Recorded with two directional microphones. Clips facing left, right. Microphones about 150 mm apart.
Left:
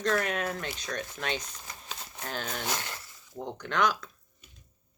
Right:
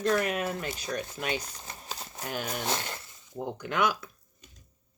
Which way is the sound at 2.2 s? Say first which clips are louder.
Right 2 dB; 10° right (ahead or behind).